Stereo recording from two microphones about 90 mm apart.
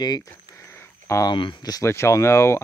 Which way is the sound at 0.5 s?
30° left (ahead or behind).